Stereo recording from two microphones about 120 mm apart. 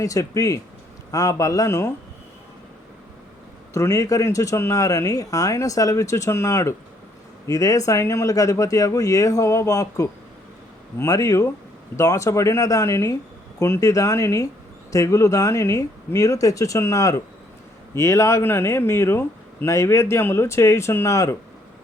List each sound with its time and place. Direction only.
0.0 s speech: 25° left (ahead or behind)
3.8 s speech: 25° left (ahead or behind)